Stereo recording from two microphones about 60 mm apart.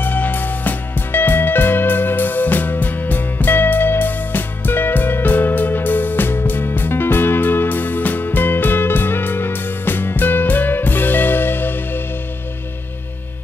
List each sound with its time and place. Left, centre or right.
0.0 s music: left